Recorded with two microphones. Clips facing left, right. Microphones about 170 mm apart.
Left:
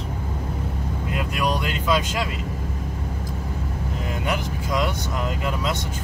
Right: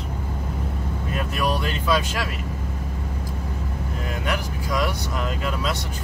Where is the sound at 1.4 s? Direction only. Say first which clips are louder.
Even; 15° left (ahead or behind).